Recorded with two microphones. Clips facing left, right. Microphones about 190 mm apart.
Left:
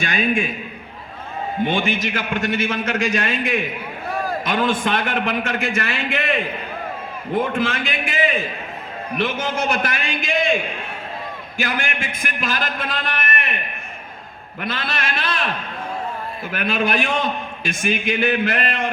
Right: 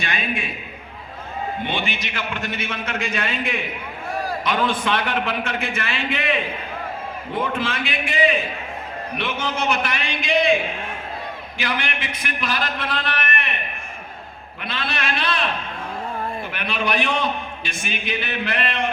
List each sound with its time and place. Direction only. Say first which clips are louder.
0.0 s a man's voice: left 6 dB; 45° left (ahead or behind)
1.6 s a man's voice: left 6 dB; 45° left (ahead or behind)
7.3 s a man's voice: left 4 dB; 45° left (ahead or behind)
9.1 s a man's voice: left 4 dB; 45° left (ahead or behind)
11.5 s a man's voice: left 2 dB; 45° left (ahead or behind)
14.6 s a man's voice: left 2 dB; 45° left (ahead or behind)
16.5 s a man's voice: left 6 dB; 45° left (ahead or behind)